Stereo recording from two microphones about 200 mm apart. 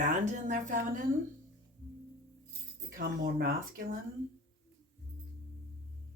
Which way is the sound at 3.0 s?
45° right (ahead or behind).